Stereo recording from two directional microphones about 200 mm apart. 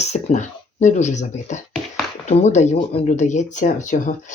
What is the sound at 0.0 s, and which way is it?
Speech, 35° left (ahead or behind).